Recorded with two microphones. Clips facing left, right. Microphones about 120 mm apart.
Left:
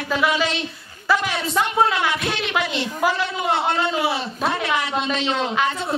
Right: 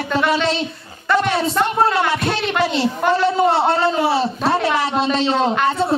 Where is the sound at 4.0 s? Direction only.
35° right (ahead or behind).